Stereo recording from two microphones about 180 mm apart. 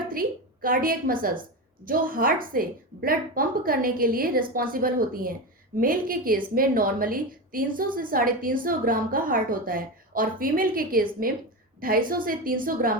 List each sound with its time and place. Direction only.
0.1 s a woman's voice: 50° right (ahead or behind)